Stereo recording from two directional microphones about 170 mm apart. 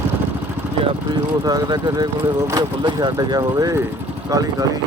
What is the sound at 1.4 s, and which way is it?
Speech, 25° right (ahead or behind).